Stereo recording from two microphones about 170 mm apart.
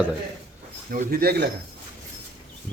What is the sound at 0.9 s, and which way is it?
Speech, 60° right (ahead or behind).